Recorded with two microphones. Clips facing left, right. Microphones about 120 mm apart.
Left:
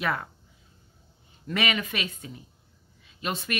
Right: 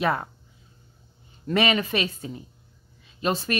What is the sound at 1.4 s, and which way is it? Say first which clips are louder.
Speech: right 6 dB; 35° right (ahead or behind).